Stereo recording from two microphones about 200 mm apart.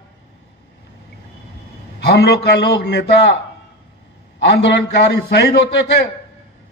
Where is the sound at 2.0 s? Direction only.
55° left (ahead or behind).